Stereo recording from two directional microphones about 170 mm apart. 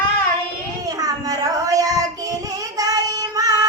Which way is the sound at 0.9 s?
20° right (ahead or behind).